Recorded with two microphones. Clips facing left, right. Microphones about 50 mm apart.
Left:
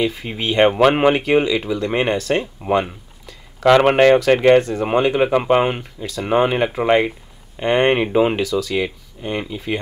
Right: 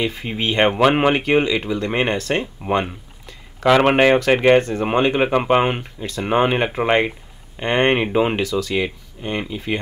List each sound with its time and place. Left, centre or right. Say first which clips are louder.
0.0 s speech: left 1 dB; centre
0.7 s speech: left 2 dB; centre
1.1 s speech: left 1 dB; centre
5.9 s speech: even; right
6.2 s speech: left 1 dB; centre
8.4 s speech: left 1 dB; right
8.7 s speech: even; centre